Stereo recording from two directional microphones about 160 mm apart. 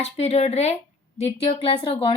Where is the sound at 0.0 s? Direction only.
40° left (ahead or behind).